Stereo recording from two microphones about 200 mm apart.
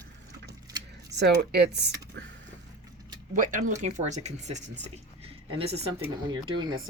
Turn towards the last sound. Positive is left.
turn(degrees=-20)  # may be behind; listen again after turning